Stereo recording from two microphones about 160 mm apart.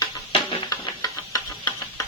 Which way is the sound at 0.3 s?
25° left (ahead or behind).